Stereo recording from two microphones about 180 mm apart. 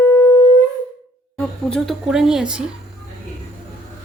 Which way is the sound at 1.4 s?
5° left (ahead or behind).